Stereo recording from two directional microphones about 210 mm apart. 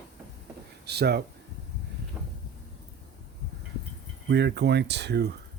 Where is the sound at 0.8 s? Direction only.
50° right (ahead or behind).